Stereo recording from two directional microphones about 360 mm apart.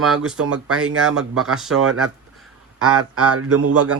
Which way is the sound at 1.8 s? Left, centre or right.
Right.